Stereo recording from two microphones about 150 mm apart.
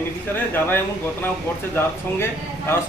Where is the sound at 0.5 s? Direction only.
15° left (ahead or behind).